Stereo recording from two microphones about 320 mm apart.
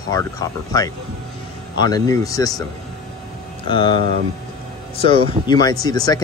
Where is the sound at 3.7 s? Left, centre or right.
Centre.